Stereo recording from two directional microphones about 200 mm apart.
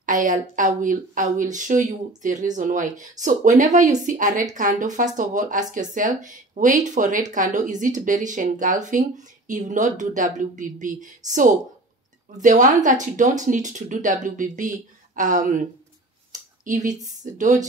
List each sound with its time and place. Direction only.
0.0 s speech: 40° right (ahead or behind)
16.3 s a sound: 40° right (ahead or behind)
17.2 s speech: 40° right (ahead or behind)